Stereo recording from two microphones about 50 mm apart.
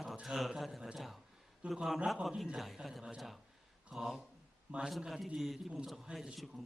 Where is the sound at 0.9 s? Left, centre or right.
Centre.